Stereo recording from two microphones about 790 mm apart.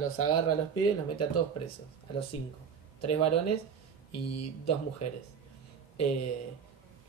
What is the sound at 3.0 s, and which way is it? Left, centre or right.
Speech, centre.